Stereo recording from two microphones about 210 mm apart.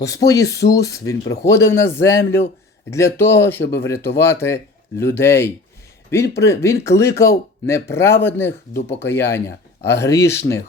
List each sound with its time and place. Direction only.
0.0 s speech: 15° left (ahead or behind)